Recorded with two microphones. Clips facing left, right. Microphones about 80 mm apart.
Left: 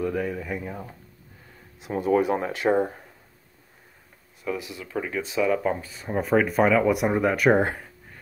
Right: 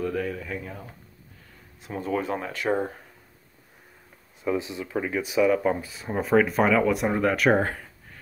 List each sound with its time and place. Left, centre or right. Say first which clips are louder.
0.0 s speech: left 1 dB; centre
4.4 s speech: right 4 dB; right
4.9 s speech: right 2 dB; centre